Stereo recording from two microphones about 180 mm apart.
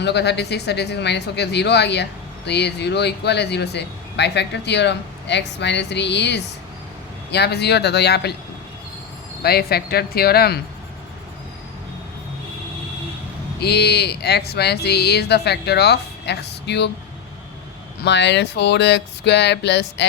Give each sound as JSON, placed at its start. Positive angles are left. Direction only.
{"t": 0.0, "sound": "speech", "side_deg": 70}
{"t": 9.4, "sound": "speech", "side_deg": 60}
{"t": 13.6, "sound": "speech", "side_deg": 65}
{"t": 18.0, "sound": "speech", "side_deg": 75}